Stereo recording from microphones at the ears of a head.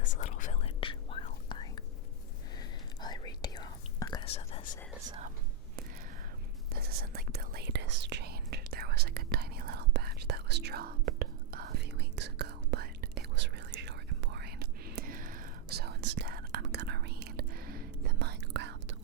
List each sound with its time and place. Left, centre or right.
0.0 s whispering: left
3.1 s whispering: left
6.7 s whispering: right